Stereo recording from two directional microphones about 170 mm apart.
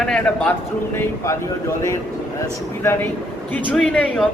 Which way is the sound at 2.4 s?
15° left (ahead or behind).